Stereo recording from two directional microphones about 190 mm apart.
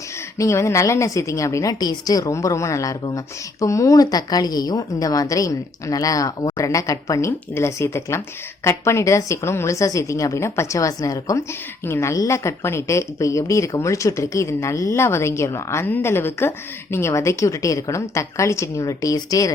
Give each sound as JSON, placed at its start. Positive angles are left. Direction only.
{"t": 0.3, "sound": "a woman's voice", "side_deg": 15}